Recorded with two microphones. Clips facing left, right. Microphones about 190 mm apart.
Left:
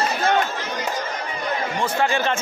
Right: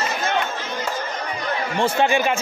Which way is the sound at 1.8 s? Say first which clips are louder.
Right 4 dB; 20° right (ahead or behind).